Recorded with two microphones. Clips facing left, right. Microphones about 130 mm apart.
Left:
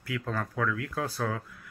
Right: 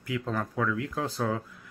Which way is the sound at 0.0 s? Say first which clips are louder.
Right 2 dB; 20° right (ahead or behind).